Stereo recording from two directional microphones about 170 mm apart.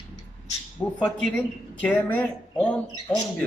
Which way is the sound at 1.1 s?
5° left (ahead or behind).